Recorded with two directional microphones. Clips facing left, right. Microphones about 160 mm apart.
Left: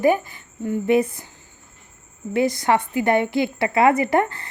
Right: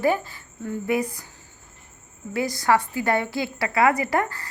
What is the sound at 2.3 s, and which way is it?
A woman's voice, 20° left (ahead or behind).